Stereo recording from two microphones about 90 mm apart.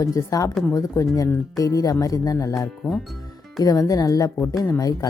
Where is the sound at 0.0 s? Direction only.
40° left (ahead or behind).